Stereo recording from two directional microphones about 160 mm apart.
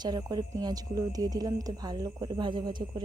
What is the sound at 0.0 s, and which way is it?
Speech, 25° right (ahead or behind).